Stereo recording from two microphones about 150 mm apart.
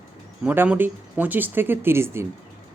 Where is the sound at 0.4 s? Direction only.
10° right (ahead or behind).